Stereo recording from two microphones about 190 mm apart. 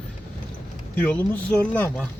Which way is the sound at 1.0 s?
5° left (ahead or behind).